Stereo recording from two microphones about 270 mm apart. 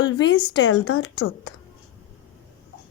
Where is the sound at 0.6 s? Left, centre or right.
Left.